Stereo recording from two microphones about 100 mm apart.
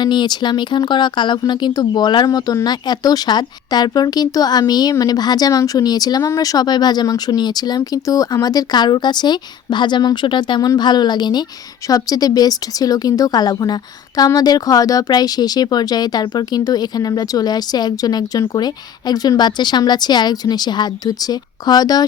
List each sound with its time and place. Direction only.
0.0 s speech: 50° left (ahead or behind)